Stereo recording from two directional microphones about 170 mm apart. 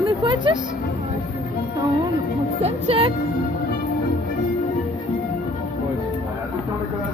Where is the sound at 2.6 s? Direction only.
35° right (ahead or behind).